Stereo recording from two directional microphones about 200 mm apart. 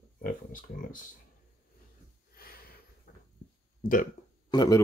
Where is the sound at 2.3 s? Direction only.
50° left (ahead or behind).